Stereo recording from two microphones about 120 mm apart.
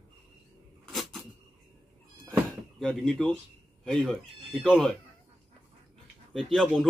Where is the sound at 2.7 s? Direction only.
5° left (ahead or behind).